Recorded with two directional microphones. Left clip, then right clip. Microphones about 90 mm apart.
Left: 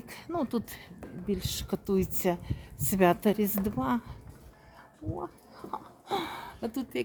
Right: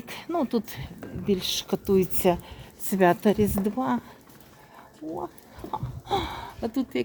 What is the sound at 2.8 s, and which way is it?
Speech, 20° left (ahead or behind).